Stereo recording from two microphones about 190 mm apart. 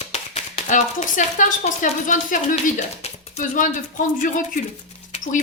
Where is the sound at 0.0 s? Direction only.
35° left (ahead or behind).